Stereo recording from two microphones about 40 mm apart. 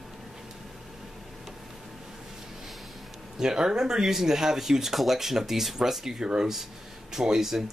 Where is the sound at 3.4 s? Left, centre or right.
Centre.